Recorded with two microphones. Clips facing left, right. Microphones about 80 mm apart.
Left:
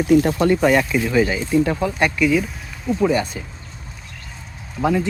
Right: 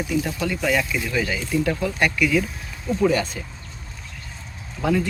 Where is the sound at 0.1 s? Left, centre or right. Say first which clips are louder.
Left 12 dB; left.